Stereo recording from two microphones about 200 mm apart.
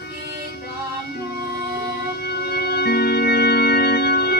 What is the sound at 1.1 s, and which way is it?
Music, 50° left (ahead or behind).